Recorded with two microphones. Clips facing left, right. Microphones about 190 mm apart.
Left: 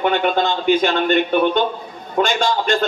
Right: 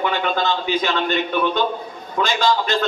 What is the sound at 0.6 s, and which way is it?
Speech, 55° left (ahead or behind).